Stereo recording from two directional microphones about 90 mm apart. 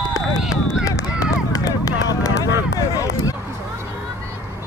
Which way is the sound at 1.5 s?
40° left (ahead or behind).